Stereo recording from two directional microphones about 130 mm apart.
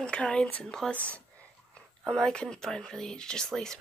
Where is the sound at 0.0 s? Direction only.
10° left (ahead or behind).